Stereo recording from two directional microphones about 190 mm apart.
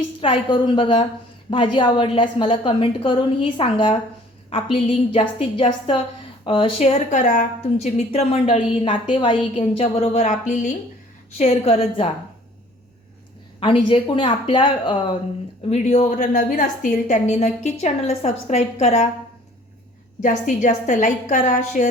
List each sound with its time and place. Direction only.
0.2 s a woman's voice: 25° left (ahead or behind)
13.6 s a woman's voice: 25° left (ahead or behind)
20.2 s a woman's voice: 40° left (ahead or behind)